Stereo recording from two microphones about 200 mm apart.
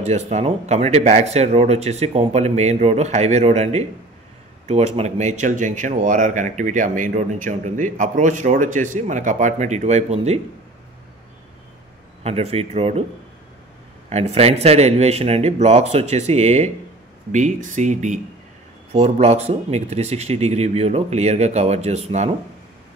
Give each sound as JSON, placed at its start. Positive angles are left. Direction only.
{"t": 0.0, "sound": "speech", "side_deg": -35}
{"t": 12.2, "sound": "speech", "side_deg": -30}
{"t": 14.0, "sound": "speech", "side_deg": -30}